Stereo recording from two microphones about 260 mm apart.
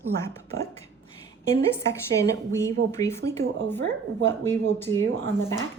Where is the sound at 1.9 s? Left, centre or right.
Centre.